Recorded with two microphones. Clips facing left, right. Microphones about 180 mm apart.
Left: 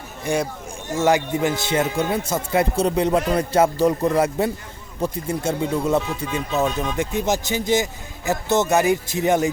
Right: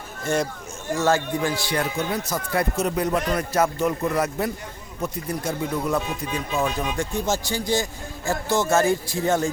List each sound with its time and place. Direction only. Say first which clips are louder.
0.9 s a man's voice: left 3 dB; 20° left (ahead or behind)